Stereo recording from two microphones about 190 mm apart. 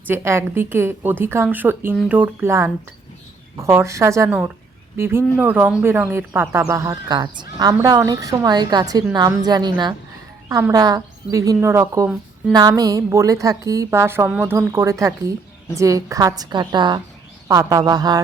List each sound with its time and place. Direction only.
0.1 s a woman's voice: 15° right (ahead or behind)